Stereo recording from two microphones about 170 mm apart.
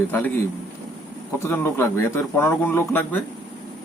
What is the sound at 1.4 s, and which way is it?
Speech, 15° left (ahead or behind).